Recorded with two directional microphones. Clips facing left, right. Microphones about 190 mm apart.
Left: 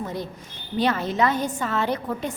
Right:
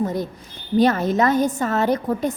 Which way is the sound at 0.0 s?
45° right (ahead or behind).